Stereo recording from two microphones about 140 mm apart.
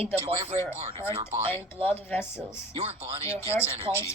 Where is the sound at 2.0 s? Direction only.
15° left (ahead or behind).